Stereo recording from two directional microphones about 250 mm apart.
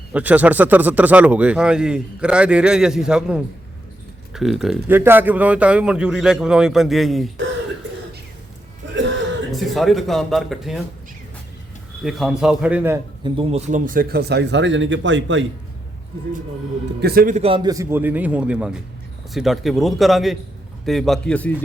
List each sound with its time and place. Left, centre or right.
0.1 s speech: centre
9.0 s a sound: right
9.5 s speech: centre
12.0 s a man's voice: centre; by 15.4 s right
17.0 s a man's voice: right; by 21.5 s centre